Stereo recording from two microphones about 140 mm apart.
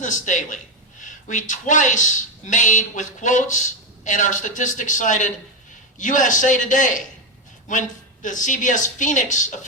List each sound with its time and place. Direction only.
0.0 s speech: 65° left (ahead or behind)